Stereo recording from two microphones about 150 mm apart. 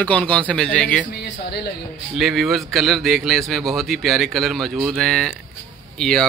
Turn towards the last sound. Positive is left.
turn(degrees=5)  # may be behind; listen again after turning